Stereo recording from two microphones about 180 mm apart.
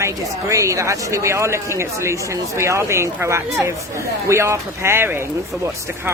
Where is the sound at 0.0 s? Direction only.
15° right (ahead or behind).